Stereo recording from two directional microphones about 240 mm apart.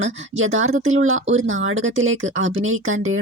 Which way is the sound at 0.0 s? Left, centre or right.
Right.